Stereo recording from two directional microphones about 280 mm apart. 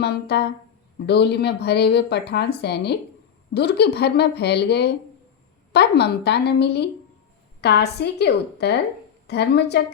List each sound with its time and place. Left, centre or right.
0.0 s speech: left